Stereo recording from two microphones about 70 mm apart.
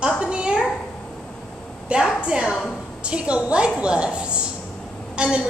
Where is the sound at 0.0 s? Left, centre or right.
Centre.